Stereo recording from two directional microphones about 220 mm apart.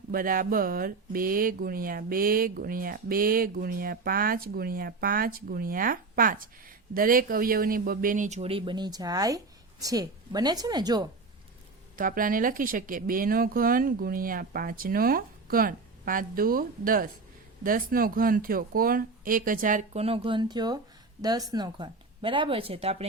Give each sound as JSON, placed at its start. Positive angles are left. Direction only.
{"t": 0.1, "sound": "a woman's voice", "side_deg": -40}
{"t": 11.9, "sound": "speech", "side_deg": -40}